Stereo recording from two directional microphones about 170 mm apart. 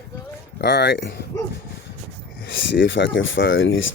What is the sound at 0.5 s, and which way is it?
Speech, 85° left.